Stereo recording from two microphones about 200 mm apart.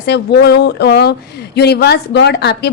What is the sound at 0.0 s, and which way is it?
A woman's voice, 55° left (ahead or behind).